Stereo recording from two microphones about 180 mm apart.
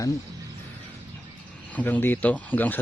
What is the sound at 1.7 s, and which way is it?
Speech, 10° left (ahead or behind).